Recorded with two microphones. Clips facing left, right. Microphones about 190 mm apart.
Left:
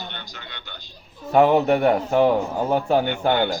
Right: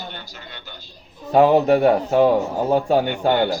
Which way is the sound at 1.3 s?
35° right (ahead or behind).